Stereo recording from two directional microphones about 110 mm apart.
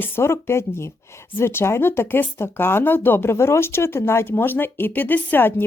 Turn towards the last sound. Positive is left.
turn(degrees=20)  # may be behind; listen again after turning